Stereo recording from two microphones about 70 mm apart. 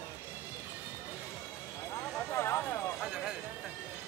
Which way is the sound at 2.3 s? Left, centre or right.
Left.